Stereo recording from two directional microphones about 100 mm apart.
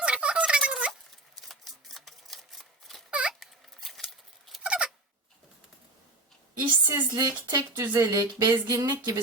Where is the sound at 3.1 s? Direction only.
10° right (ahead or behind).